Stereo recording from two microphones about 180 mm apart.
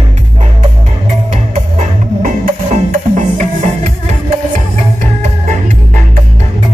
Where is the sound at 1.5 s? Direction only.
45° right (ahead or behind).